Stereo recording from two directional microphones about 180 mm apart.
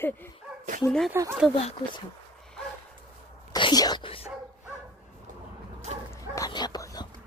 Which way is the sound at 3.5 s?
25° left (ahead or behind).